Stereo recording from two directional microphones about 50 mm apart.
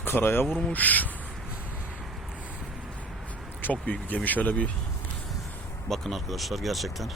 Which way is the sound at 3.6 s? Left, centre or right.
Left.